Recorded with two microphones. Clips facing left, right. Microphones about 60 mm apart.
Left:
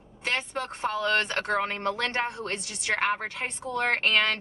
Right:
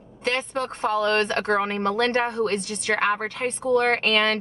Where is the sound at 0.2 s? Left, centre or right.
Centre.